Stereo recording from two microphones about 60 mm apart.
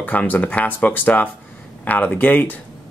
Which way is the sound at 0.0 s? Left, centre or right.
Left.